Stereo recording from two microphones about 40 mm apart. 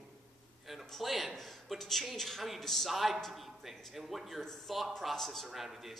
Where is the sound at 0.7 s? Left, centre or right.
Centre.